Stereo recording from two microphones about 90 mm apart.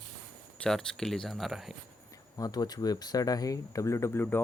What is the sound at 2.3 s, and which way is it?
Speech, 45° left (ahead or behind).